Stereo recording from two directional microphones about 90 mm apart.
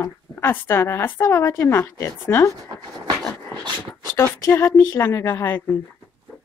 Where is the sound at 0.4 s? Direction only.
25° left (ahead or behind).